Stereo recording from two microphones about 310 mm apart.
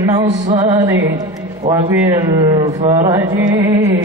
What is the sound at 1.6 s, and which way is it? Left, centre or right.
Speech, centre.